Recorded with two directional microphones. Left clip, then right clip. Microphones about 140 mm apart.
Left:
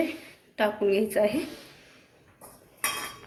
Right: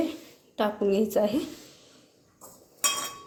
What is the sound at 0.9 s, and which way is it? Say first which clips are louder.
Speech: even; centre (ahead or behind).